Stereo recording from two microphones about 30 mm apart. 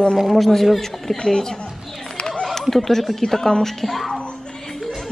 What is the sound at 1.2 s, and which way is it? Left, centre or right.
Speech, left.